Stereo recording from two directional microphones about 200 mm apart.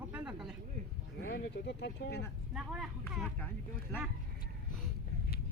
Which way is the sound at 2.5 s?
5° right (ahead or behind).